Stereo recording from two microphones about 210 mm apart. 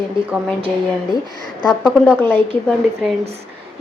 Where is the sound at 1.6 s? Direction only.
Centre (ahead or behind).